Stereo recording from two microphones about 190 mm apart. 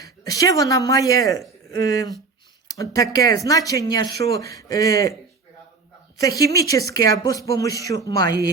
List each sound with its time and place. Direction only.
0.0 s speech: 20° left (ahead or behind)
4.1 s speech: 55° right (ahead or behind)
4.4 s speech: 15° left (ahead or behind)
6.1 s a woman's voice: 20° left (ahead or behind)